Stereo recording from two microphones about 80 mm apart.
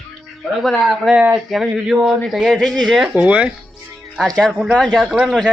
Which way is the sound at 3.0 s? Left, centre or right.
Centre.